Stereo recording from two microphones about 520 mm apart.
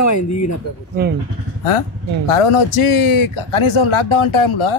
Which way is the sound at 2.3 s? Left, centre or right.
Left.